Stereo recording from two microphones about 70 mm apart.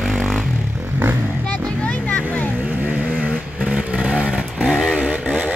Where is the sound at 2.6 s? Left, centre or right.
Right; by 4.9 s centre.